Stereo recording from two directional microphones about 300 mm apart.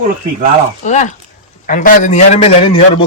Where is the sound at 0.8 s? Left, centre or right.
Left.